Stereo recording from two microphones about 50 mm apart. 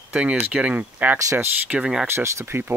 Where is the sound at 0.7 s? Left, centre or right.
Right.